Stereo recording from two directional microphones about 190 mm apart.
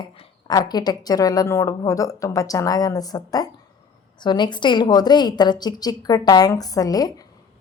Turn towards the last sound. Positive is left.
turn(degrees=20)  # may be behind; listen again after turning